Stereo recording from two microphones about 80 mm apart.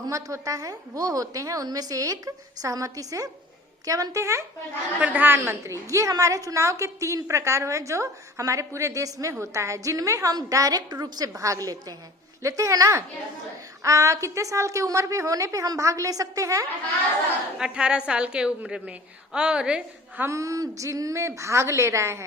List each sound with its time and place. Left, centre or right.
0.1 s a woman's voice: right
4.9 s a woman's voice: centre
5.9 s a woman's voice: right
11.3 s a woman's voice: right
17.6 s a woman's voice: centre
20.2 s a woman's voice: right